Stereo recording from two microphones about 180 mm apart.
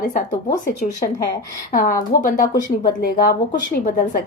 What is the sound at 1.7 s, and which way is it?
A woman's voice, 50° left (ahead or behind).